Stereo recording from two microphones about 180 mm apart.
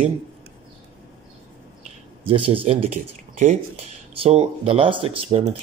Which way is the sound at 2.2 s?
30° right (ahead or behind).